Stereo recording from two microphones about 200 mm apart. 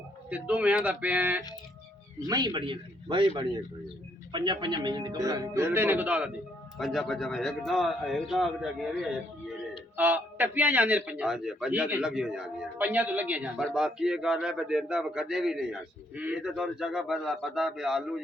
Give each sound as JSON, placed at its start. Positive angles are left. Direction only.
{"t": 0.3, "sound": "speech", "side_deg": -5}
{"t": 2.2, "sound": "a man's voice", "side_deg": -20}
{"t": 10.0, "sound": "a man's voice", "side_deg": -10}